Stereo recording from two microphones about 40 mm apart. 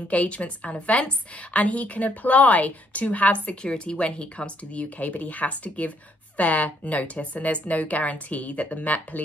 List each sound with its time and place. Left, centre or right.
0.1 s speech: left
3.6 s speech: left
4.8 s speech: left